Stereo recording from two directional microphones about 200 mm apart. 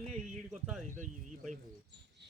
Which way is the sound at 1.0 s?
40° right (ahead or behind).